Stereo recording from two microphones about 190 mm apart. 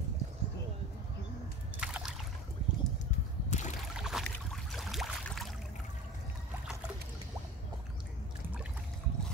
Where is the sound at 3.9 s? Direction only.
Centre (ahead or behind).